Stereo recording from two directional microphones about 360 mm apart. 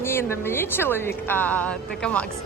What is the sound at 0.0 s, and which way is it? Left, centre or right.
Speech, centre.